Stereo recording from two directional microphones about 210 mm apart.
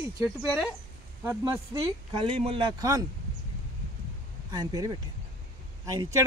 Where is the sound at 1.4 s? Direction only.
20° right (ahead or behind).